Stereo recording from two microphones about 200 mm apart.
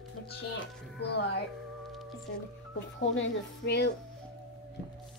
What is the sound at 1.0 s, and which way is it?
Speech, 55° left (ahead or behind).